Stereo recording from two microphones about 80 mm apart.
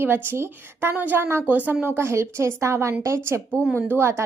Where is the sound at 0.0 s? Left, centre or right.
Right.